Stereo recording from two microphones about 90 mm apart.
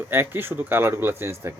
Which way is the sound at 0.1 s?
25° right (ahead or behind).